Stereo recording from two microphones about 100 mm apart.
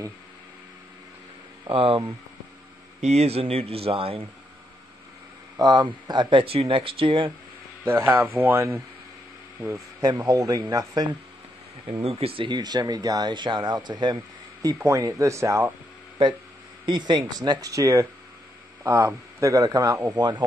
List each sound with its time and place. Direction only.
1.7 s speech: 65° right (ahead or behind)
3.1 s speech: 90° right; by 4.3 s 70° right (ahead or behind)
5.6 s speech: 45° right (ahead or behind)
6.4 s speech: 70° right (ahead or behind)
7.8 s speech: 25° right (ahead or behind)
9.9 s speech: 40° right (ahead or behind)
12.0 s speech: 80° right
12.4 s speech: 45° right (ahead or behind)
14.9 s speech: 35° right (ahead or behind)
16.8 s speech: 50° right (ahead or behind); by 20.0 s 35° right (ahead or behind)
20.2 s speech: 50° right (ahead or behind)